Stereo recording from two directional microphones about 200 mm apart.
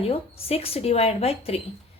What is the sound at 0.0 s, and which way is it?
A woman's voice, 30° left (ahead or behind).